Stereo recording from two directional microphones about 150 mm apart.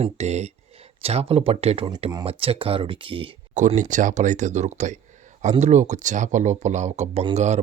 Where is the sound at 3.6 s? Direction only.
55° right (ahead or behind).